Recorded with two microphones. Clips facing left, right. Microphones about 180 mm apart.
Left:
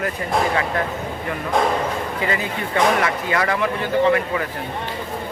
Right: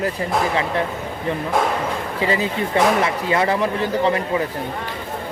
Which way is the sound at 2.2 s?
30° right (ahead or behind).